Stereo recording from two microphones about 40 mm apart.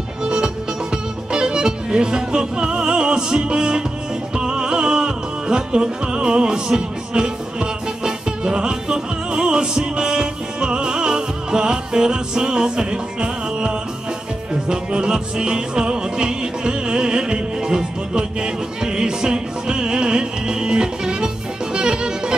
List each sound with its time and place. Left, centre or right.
0.2 s music: centre